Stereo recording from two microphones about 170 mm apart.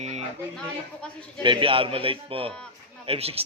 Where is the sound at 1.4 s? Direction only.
30° right (ahead or behind).